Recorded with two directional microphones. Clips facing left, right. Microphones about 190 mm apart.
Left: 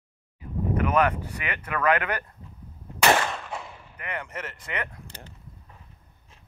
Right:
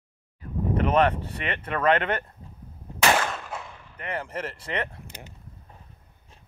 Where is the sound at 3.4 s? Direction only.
Centre (ahead or behind).